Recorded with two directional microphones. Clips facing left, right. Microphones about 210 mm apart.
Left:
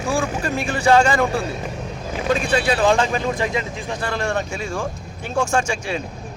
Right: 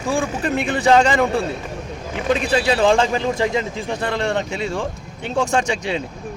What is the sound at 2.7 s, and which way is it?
Speech, 25° right (ahead or behind).